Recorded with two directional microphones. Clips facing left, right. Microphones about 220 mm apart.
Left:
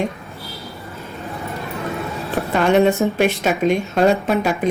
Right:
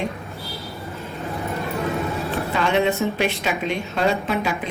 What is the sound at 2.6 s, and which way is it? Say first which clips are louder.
A woman's voice: left 6 dB; 45° left (ahead or behind).